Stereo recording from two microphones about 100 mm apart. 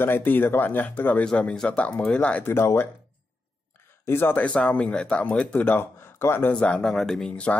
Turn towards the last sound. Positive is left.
turn(degrees=10)  # may be behind; listen again after turning